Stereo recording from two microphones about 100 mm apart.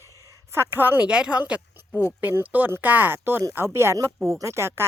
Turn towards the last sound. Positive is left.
turn(degrees=-25)  # may be behind; listen again after turning